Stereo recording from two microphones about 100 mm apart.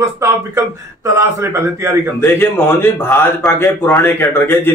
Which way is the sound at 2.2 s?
25° left (ahead or behind).